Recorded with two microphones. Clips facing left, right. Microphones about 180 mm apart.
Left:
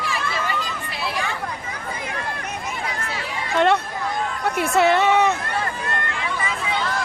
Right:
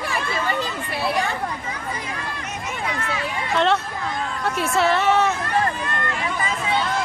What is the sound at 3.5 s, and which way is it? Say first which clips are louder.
Speech: left 2 dB; 15° left (ahead or behind).